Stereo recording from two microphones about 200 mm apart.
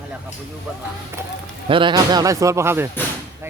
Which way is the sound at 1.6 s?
25° right (ahead or behind).